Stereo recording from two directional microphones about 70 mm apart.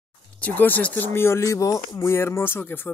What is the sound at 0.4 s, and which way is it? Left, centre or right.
Speech, left.